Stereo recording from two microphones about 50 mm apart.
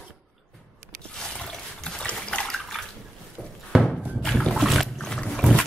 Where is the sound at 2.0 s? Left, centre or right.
Left.